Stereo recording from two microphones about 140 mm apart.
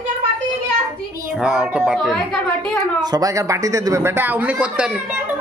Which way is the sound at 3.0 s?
25° right (ahead or behind).